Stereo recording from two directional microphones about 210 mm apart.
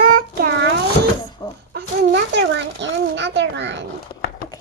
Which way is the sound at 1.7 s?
55° right (ahead or behind).